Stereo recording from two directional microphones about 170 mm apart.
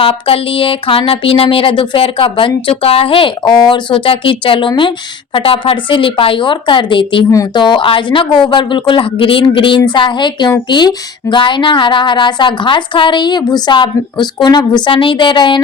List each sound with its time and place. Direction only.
0.0 s speech: 35° left (ahead or behind)